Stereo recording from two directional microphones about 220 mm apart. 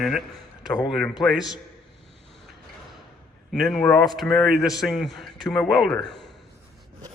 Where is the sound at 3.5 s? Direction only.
5° left (ahead or behind).